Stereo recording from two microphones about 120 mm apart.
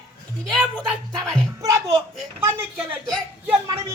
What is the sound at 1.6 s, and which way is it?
A child's voice, 25° right (ahead or behind).